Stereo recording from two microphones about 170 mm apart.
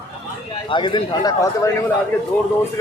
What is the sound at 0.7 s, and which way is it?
A man's voice, 30° left (ahead or behind).